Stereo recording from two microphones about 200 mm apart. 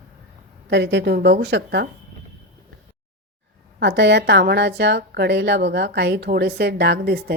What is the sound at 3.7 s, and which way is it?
A woman's voice, 60° right (ahead or behind).